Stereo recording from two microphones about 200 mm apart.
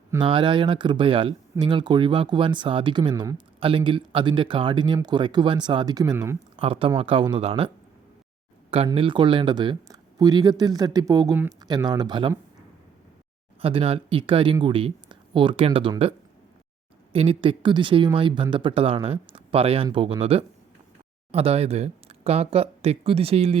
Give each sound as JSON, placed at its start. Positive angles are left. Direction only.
{"t": 0.2, "sound": "speech", "side_deg": -25}
{"t": 6.6, "sound": "speech", "side_deg": -25}
{"t": 8.9, "sound": "speech", "side_deg": -25}
{"t": 13.6, "sound": "speech", "side_deg": -30}